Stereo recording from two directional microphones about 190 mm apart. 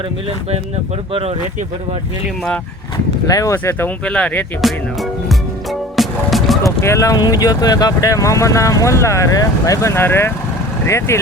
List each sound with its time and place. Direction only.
1.1 s speech: 30° right (ahead or behind)
3.2 s speech: 15° left (ahead or behind); by 5.4 s centre (ahead or behind)
6.0 s music: centre (ahead or behind)
6.6 s speech: 15° left (ahead or behind)